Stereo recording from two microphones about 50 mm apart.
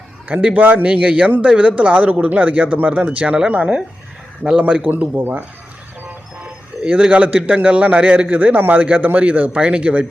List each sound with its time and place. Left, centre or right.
0.5 s a man's voice: right
4.7 s a man's voice: right
5.1 s speech: right
6.4 s music: right
7.1 s speech: right
8.3 s a man's voice: right
9.6 s speech: right